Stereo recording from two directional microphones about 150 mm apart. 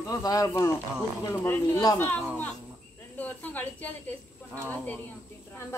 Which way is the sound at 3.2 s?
10° left (ahead or behind).